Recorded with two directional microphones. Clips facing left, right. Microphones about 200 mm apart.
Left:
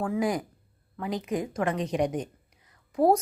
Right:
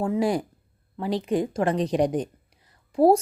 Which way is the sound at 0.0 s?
30° right (ahead or behind).